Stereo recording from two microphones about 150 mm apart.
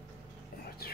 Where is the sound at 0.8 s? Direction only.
90° left.